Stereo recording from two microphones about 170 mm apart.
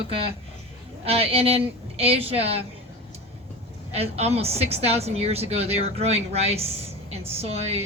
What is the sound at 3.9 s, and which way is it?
A woman's voice, 35° right (ahead or behind).